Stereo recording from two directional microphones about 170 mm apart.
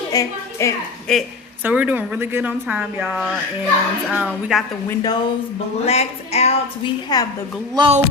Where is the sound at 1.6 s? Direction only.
10° right (ahead or behind).